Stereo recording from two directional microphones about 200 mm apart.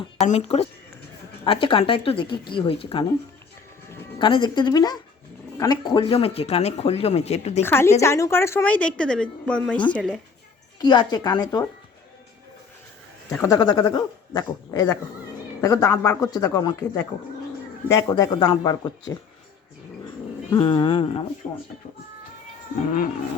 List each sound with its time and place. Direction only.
0.3 s speech: 30° left (ahead or behind)
4.2 s speech: 25° left (ahead or behind)
7.6 s a woman's voice: 10° left (ahead or behind)
10.8 s speech: 20° left (ahead or behind)
13.4 s a woman's voice: 20° left (ahead or behind)
20.5 s speech: 25° left (ahead or behind)